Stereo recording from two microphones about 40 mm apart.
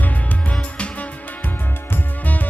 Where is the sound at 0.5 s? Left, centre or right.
Left.